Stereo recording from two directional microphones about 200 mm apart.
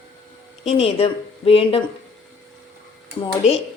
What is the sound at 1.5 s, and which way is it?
Speech, 30° left (ahead or behind).